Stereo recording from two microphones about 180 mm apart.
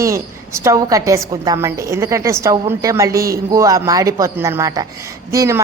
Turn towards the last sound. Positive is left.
turn(degrees=-15)  # may be behind; listen again after turning